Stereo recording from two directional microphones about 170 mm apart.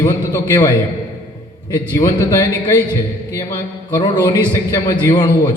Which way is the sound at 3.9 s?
25° left (ahead or behind).